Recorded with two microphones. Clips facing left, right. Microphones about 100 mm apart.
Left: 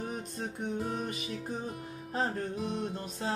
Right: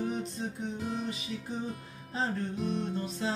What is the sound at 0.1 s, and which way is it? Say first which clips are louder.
Music: right 3 dB; 50° left (ahead or behind).